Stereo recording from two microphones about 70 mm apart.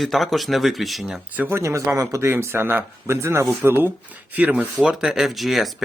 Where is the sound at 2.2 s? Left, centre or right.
Right.